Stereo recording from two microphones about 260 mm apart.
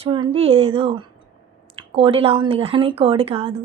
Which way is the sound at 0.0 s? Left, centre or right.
Right.